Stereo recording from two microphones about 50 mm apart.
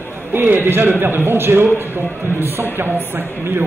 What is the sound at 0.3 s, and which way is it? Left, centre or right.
A man's voice, right.